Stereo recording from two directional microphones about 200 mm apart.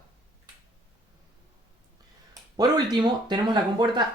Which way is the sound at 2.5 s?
20° right (ahead or behind).